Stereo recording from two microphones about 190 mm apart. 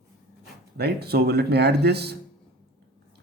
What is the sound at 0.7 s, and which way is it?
Speech, 55° right (ahead or behind).